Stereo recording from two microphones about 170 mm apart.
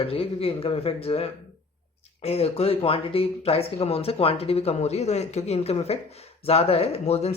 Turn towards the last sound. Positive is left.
turn(degrees=35)  # may be behind; listen again after turning